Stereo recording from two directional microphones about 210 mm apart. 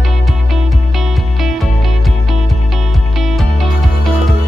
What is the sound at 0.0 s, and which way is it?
Music, centre (ahead or behind).